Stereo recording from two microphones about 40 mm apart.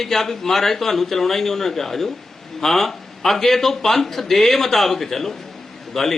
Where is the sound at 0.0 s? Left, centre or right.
Centre.